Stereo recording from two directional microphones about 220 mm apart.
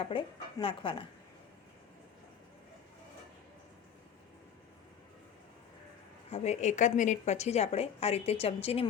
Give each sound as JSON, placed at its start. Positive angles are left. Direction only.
{"t": 0.1, "sound": "a woman's voice", "side_deg": 25}
{"t": 6.3, "sound": "a woman's voice", "side_deg": 30}